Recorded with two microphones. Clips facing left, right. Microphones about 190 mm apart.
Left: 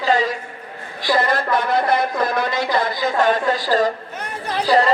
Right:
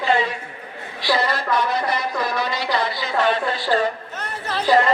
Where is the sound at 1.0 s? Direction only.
50° left (ahead or behind).